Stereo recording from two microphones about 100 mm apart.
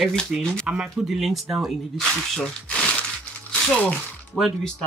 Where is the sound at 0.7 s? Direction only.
5° right (ahead or behind).